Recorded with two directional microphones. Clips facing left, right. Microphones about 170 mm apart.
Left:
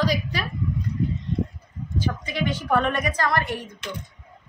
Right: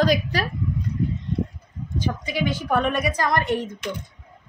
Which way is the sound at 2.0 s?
10° right (ahead or behind).